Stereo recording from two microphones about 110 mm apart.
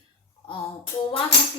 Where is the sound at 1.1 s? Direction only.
55° left (ahead or behind).